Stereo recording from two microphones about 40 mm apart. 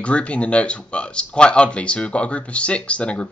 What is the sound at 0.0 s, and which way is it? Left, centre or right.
Speech, left.